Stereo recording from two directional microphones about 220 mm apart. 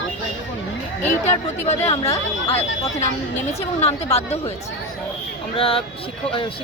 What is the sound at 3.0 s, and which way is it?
Speech, 30° left (ahead or behind).